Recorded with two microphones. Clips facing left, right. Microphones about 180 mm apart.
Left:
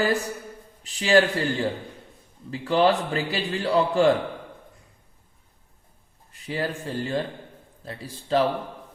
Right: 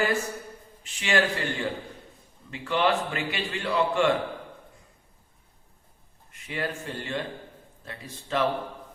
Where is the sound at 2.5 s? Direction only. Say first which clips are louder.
Left 5 dB; 35° left (ahead or behind).